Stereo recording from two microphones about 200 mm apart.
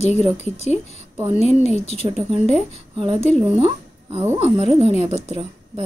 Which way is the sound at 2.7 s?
30° right (ahead or behind).